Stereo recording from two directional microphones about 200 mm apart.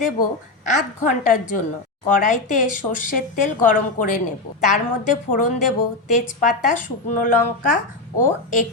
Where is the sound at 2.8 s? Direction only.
40° left (ahead or behind).